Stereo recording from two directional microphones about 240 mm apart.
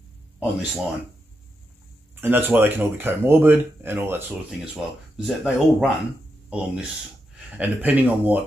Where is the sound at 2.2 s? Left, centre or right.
Centre.